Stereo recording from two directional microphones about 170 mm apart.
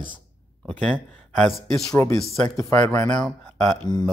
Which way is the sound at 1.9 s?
15° left (ahead or behind).